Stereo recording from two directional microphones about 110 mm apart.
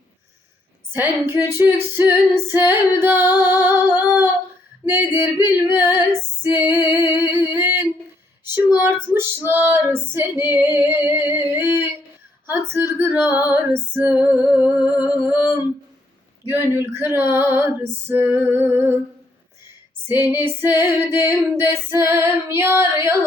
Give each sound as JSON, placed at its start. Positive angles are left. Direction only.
{"t": 0.9, "sound": "female singing", "side_deg": -20}
{"t": 13.5, "sound": "music", "side_deg": -20}
{"t": 16.5, "sound": "female singing", "side_deg": -20}
{"t": 18.1, "sound": "music", "side_deg": -15}
{"t": 20.1, "sound": "female singing", "side_deg": -20}